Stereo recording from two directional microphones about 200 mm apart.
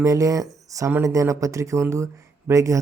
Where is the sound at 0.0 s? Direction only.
15° right (ahead or behind).